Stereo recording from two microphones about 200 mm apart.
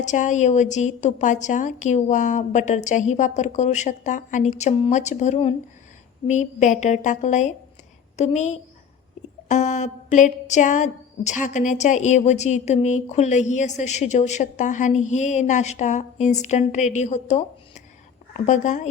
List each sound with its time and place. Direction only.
0.0 s a woman's voice: 35° left (ahead or behind)
18.4 s speech: 40° left (ahead or behind)